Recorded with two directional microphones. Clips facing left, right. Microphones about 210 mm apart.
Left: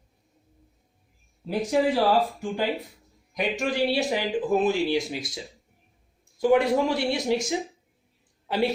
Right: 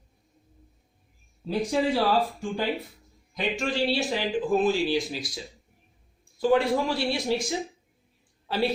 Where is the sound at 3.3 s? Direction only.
15° left (ahead or behind).